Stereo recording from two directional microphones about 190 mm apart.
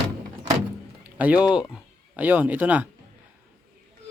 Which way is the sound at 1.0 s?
10° right (ahead or behind).